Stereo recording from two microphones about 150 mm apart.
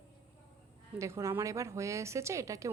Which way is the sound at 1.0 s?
20° right (ahead or behind).